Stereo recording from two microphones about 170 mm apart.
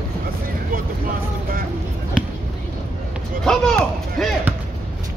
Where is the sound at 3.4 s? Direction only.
5° left (ahead or behind).